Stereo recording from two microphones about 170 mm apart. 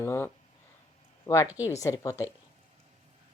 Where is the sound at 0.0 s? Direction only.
15° left (ahead or behind).